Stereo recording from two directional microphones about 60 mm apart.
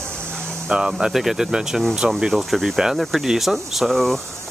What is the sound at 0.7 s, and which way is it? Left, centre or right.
Speech, centre.